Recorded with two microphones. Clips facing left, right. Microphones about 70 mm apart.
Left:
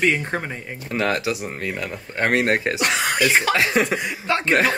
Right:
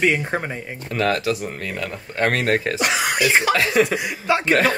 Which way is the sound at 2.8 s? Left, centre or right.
Centre.